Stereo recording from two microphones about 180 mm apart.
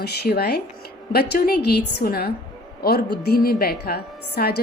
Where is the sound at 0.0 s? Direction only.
60° left (ahead or behind).